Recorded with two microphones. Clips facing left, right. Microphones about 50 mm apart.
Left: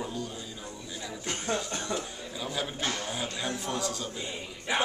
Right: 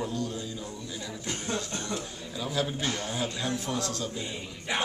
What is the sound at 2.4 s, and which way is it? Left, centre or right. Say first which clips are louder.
Speech: right 3 dB; centre.